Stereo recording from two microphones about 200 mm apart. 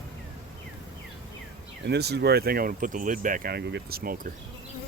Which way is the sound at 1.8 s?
55° right (ahead or behind).